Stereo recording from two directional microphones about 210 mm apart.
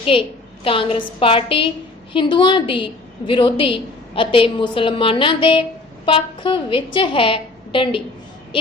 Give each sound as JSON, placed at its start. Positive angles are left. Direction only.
{"t": 0.0, "sound": "a woman's voice", "side_deg": 25}